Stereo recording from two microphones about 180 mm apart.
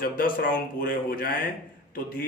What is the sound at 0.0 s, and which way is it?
Speech, 55° left (ahead or behind).